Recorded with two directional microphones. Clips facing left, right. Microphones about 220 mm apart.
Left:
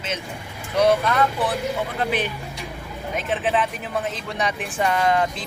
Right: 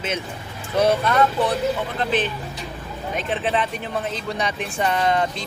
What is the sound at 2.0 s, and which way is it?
Speech, 10° left (ahead or behind).